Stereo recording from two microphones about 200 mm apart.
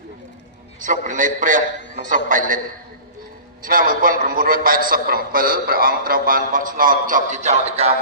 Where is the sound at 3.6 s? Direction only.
45° right (ahead or behind).